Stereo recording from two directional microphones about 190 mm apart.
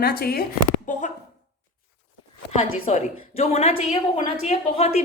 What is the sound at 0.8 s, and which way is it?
Speech, 40° left (ahead or behind).